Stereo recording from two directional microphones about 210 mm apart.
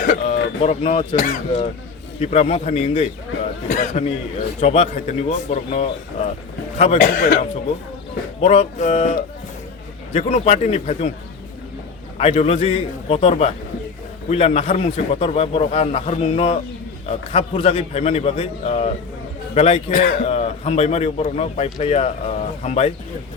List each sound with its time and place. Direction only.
0.0 s a sound: 40° left (ahead or behind)
0.6 s a man's voice: 30° left (ahead or behind)
3.7 s a man's voice: 40° left (ahead or behind)
8.4 s a man's voice: 30° left (ahead or behind)
12.1 s a man's voice: 30° left (ahead or behind)
19.9 s a man's voice: 40° left (ahead or behind)